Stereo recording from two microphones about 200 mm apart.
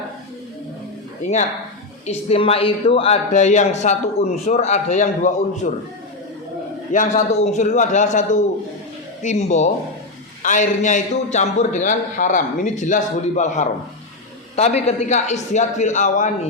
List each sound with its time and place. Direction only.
2.0 s speech: 30° left (ahead or behind)
6.9 s speech: 40° left (ahead or behind)